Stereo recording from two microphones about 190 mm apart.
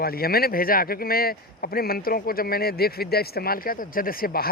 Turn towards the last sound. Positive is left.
turn(degrees=50)  # may be behind; listen again after turning